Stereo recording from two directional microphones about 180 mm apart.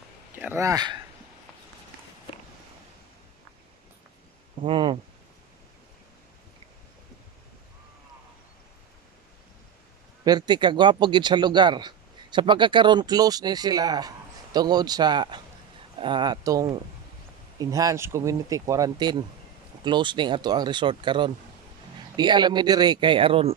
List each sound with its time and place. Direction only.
0.4 s speech: 15° right (ahead or behind)
4.6 s speech: 30° right (ahead or behind)
10.2 s speech: 25° right (ahead or behind)